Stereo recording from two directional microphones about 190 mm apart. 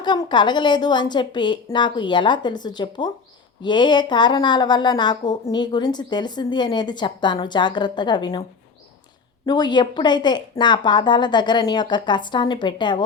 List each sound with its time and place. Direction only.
0.0 s speech: 25° left (ahead or behind)
9.5 s speech: 20° left (ahead or behind)